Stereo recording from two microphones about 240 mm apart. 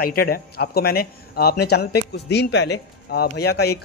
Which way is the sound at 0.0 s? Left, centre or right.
Left.